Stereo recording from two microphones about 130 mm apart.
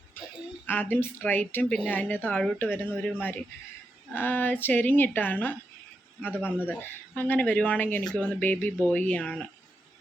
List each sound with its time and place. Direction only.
0.7 s a woman's voice: 15° left (ahead or behind)